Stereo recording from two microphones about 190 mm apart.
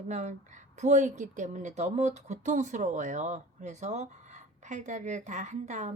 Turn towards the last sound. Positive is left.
turn(degrees=-40)  # may be behind; listen again after turning